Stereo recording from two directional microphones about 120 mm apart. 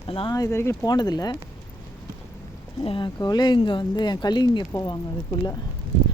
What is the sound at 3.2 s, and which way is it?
Speech, 35° left (ahead or behind).